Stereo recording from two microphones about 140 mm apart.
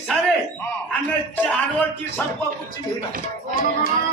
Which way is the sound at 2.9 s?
80° right.